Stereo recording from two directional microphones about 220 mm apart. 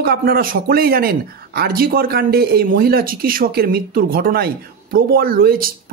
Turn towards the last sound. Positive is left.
turn(degrees=-40)  # may be behind; listen again after turning